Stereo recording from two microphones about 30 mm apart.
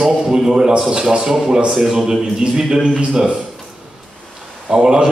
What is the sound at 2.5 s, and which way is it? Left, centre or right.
Speech, centre.